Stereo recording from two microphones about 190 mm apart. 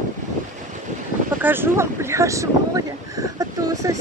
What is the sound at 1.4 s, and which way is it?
Speech, 10° right (ahead or behind).